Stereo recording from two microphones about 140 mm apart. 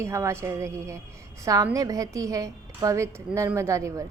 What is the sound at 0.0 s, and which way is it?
A woman's voice, 20° right (ahead or behind).